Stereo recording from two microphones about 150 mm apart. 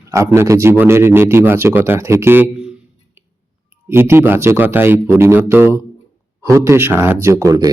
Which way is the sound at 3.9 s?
15° right (ahead or behind).